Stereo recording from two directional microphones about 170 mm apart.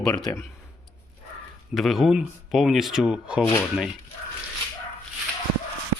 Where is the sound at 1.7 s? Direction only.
Centre (ahead or behind).